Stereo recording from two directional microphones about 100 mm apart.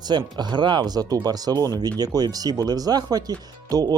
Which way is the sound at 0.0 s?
45° right (ahead or behind).